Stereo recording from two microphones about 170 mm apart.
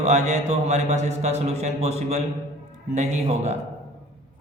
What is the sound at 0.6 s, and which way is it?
A man's voice, 40° right (ahead or behind).